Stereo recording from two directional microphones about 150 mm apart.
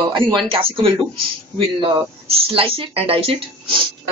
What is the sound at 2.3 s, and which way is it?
Speech, 40° right (ahead or behind).